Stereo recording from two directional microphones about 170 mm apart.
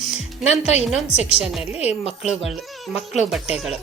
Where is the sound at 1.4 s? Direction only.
5° right (ahead or behind).